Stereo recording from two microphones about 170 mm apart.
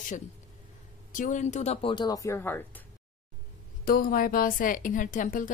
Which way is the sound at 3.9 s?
55° left (ahead or behind).